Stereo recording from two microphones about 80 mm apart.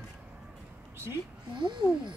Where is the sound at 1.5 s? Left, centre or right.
Right.